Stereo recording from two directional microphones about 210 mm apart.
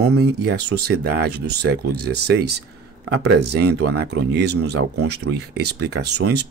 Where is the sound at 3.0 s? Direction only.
60° right (ahead or behind).